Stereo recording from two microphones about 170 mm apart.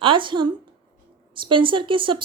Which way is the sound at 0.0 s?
30° right (ahead or behind).